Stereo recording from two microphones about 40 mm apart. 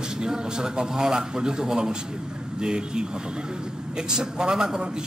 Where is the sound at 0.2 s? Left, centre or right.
Centre.